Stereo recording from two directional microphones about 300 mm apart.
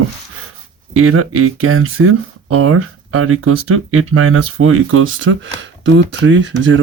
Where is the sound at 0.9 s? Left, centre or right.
Right.